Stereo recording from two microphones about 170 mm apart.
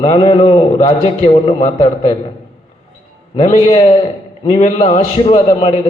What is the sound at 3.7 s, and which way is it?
A man's voice, 35° left (ahead or behind).